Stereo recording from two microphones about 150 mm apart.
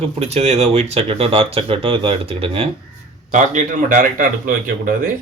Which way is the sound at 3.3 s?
55° right (ahead or behind).